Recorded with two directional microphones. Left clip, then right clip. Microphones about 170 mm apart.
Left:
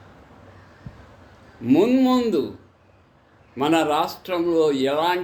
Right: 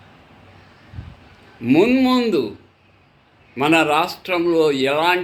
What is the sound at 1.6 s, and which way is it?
Speech, 15° right (ahead or behind).